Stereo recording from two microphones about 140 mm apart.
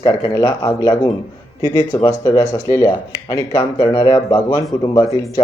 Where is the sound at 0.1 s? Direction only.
25° left (ahead or behind).